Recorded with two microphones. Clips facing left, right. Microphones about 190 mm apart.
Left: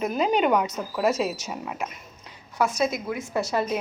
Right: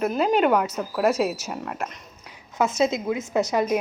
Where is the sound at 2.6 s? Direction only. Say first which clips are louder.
Right 2 dB; 25° right (ahead or behind).